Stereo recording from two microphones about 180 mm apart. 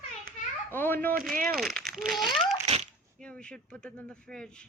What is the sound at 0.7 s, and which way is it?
A child's voice, 10° left (ahead or behind).